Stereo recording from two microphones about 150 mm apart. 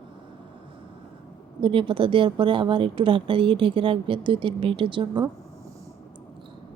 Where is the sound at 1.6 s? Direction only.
35° right (ahead or behind).